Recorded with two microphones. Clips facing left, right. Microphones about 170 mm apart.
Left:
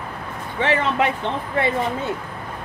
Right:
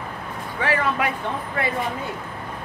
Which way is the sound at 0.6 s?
25° left (ahead or behind).